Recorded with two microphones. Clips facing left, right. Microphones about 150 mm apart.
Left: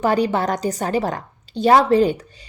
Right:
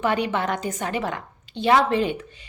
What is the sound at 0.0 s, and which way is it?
A woman's voice, 35° left (ahead or behind).